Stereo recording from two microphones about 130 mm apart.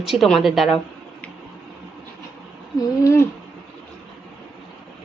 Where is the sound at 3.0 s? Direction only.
20° left (ahead or behind).